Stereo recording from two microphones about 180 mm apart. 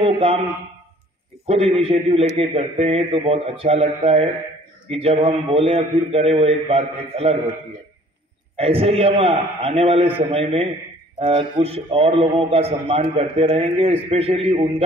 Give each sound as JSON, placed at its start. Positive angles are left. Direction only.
{"t": 0.0, "sound": "a sound", "side_deg": -35}
{"t": 1.5, "sound": "a man's voice", "side_deg": -35}
{"t": 8.5, "sound": "a man's voice", "side_deg": -35}